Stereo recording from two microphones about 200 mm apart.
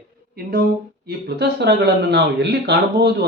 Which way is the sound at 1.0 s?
55° right (ahead or behind).